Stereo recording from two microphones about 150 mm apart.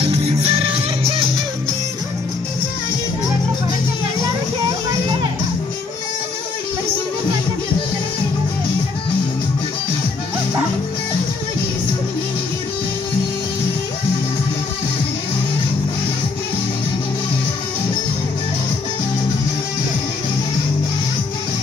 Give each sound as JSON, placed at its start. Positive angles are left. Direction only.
{"t": 0.0, "sound": "music", "side_deg": -40}